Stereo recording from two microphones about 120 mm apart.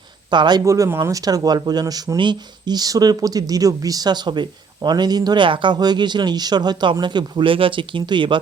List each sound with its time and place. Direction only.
0.3 s speech: 40° right (ahead or behind)
0.6 s speech: 25° right (ahead or behind); by 8.4 s 40° right (ahead or behind)